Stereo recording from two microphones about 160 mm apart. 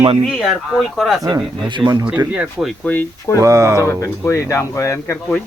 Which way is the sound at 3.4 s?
20° right (ahead or behind).